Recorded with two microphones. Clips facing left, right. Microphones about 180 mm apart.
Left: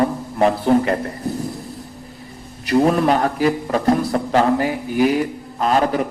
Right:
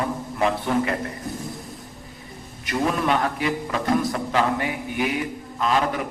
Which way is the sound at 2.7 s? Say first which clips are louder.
Left 7 dB; 40° left (ahead or behind).